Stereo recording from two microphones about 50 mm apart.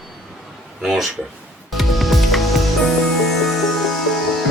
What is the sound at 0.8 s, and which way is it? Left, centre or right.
Speech, centre.